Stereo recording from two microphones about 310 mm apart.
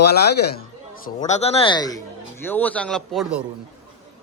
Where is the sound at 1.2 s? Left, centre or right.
Left; by 3.4 s centre.